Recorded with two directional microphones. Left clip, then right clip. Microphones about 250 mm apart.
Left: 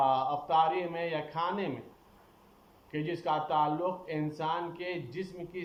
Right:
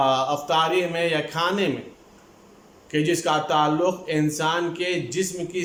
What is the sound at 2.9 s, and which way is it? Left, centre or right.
Speech, right.